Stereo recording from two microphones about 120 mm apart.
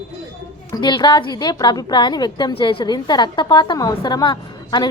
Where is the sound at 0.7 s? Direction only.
40° left (ahead or behind).